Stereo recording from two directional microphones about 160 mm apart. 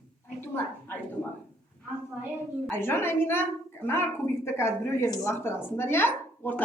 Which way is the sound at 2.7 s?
15° left (ahead or behind).